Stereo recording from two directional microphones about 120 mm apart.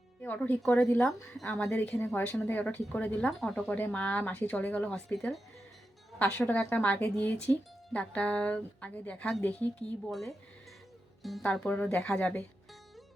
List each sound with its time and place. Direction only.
0.2 s speech: 15° left (ahead or behind)
0.6 s speech: 5° left (ahead or behind)
10.1 s speech: centre (ahead or behind)
11.4 s speech: 10° left (ahead or behind)